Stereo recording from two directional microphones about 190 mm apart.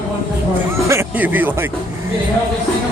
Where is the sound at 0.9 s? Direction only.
10° right (ahead or behind).